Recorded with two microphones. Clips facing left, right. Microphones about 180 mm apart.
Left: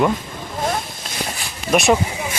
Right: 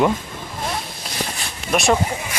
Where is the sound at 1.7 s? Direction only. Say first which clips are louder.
Left 3 dB; centre (ahead or behind).